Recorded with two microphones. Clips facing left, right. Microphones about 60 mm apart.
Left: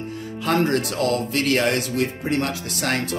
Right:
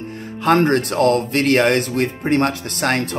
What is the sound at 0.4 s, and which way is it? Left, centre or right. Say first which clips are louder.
Speech: right 5 dB; right.